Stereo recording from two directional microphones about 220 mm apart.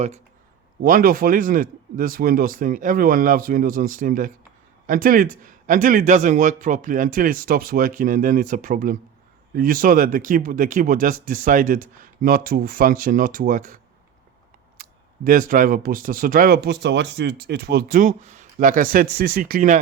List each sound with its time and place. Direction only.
0.8 s speech: 40° right (ahead or behind)
14.8 s speech: 40° right (ahead or behind)